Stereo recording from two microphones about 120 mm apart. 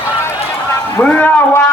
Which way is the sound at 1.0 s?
10° left (ahead or behind).